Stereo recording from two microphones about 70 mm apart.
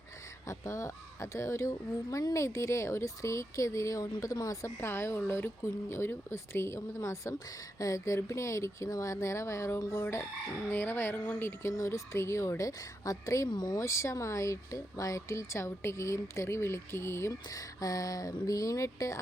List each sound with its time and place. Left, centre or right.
0.4 s speech: left
4.8 s speech: left
11.8 s speech: left
13.5 s speech: left
13.7 s speech: left